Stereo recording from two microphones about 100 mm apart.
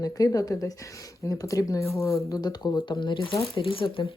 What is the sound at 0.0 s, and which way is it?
Speech, 40° left (ahead or behind).